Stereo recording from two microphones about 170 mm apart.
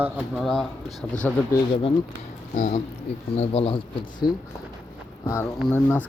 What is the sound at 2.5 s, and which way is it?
Speech, 45° left (ahead or behind).